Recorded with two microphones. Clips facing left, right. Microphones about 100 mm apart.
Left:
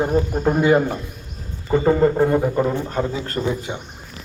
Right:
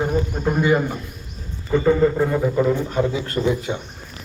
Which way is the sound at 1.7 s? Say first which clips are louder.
Left 1 dB; 35° left (ahead or behind).